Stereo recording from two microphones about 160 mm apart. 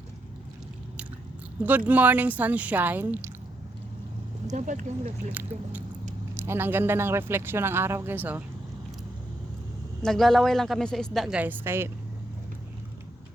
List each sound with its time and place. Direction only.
1.6 s speech: 10° right (ahead or behind)
4.5 s speech: 50° right (ahead or behind)
5.3 s speech: 10° right (ahead or behind)
10.0 s a woman's voice: 5° left (ahead or behind); by 11.9 s 15° right (ahead or behind)